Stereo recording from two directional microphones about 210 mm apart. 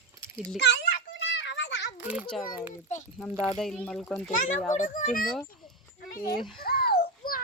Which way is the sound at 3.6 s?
Centre (ahead or behind).